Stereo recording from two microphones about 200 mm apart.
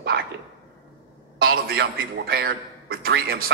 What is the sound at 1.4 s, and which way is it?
A man's voice, 50° right (ahead or behind).